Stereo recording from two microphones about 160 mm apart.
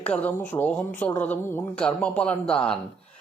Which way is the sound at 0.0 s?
10° left (ahead or behind).